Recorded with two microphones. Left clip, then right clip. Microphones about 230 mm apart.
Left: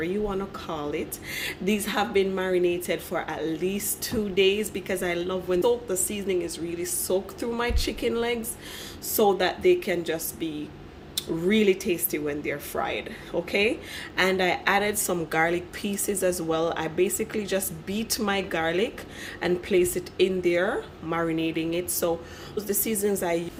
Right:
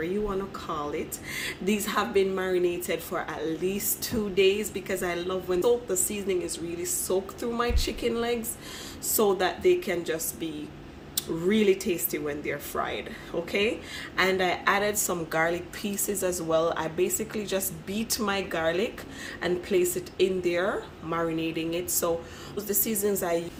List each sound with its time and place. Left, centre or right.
0.0 s a woman's voice: centre